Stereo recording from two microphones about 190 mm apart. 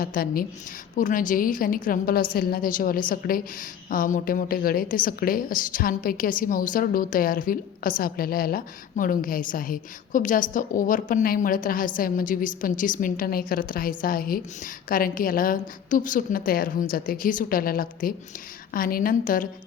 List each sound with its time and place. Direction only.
0.0 s a woman's voice: 50° left (ahead or behind)